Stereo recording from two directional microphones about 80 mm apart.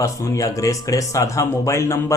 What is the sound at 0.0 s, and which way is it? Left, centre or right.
Speech, left.